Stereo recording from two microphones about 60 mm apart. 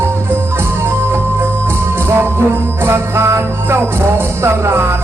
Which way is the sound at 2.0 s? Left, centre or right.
Right.